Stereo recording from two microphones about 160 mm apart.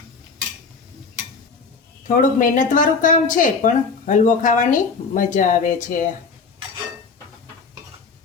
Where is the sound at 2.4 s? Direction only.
55° left (ahead or behind).